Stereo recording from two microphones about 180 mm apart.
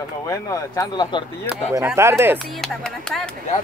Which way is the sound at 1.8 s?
15° right (ahead or behind).